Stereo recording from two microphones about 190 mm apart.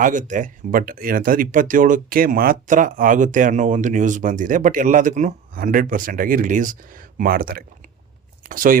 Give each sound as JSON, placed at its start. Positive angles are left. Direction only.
{"t": 0.0, "sound": "speech", "side_deg": -40}